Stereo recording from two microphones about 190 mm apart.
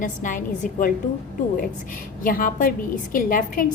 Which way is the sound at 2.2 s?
45° left (ahead or behind).